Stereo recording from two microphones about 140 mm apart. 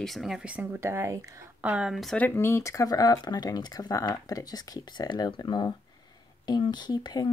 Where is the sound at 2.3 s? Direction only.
15° left (ahead or behind).